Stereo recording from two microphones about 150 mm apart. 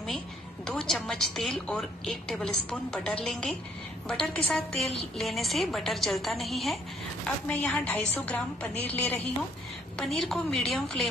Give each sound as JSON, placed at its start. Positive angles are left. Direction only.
{"t": 0.7, "sound": "a woman's voice", "side_deg": 0}
{"t": 9.9, "sound": "a woman's voice", "side_deg": 5}